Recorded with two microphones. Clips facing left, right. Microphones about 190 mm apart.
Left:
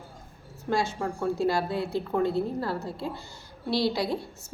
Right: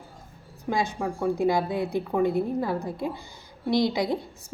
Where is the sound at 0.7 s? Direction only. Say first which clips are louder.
Right 1 dB; 15° right (ahead or behind).